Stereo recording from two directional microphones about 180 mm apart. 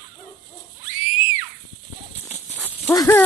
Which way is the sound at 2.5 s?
10° right (ahead or behind).